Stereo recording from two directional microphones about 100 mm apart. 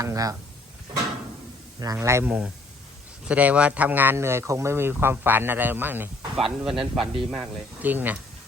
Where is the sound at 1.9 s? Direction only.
25° right (ahead or behind).